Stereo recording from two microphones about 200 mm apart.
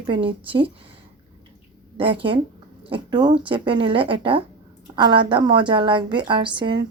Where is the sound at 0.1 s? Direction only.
25° right (ahead or behind).